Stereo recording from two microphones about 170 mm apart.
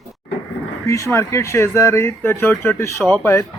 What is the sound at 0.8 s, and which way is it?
Speech, 15° left (ahead or behind).